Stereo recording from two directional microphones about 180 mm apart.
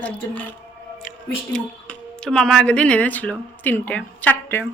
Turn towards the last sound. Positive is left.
turn(degrees=10)  # may be behind; listen again after turning